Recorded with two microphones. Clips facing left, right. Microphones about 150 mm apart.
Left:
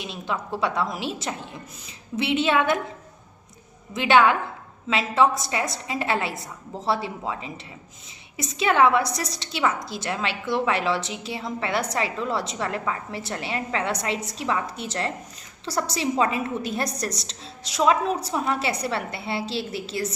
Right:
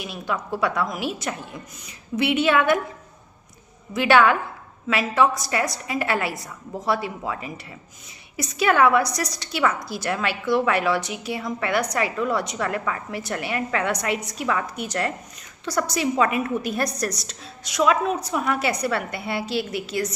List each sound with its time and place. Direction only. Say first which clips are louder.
0.0 s a woman's voice: right 1 dB; 25° left (ahead or behind)
3.9 s a woman's voice: right 1 dB; 20° left (ahead or behind)